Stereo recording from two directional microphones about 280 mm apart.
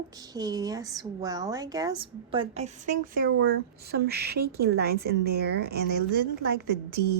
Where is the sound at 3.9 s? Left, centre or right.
Right.